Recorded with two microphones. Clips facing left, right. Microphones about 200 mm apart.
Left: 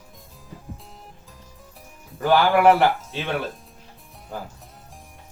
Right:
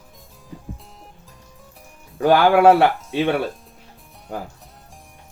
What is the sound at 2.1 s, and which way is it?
Speech, 70° right (ahead or behind).